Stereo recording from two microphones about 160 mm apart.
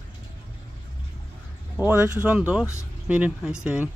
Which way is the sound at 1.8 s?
10° right (ahead or behind).